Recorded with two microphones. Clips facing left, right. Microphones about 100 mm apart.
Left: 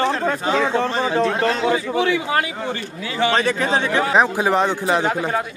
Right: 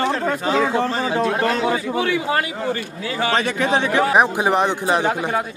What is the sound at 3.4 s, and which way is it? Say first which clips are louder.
Speech: even; 35° left (ahead or behind).